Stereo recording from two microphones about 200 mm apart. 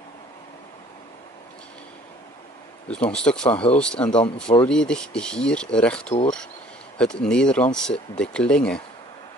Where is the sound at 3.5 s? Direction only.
30° left (ahead or behind).